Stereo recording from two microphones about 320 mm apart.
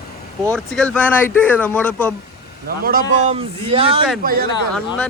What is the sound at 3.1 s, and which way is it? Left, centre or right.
A man's voice, centre.